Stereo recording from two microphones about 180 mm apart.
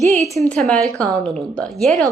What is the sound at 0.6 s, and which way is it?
Speech, centre (ahead or behind).